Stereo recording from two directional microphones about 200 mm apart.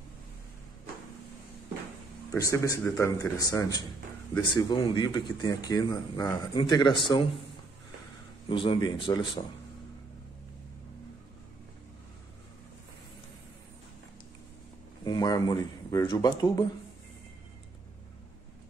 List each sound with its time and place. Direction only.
2.3 s speech: 15° left (ahead or behind)
8.5 s speech: 25° left (ahead or behind)
15.0 s speech: 20° left (ahead or behind)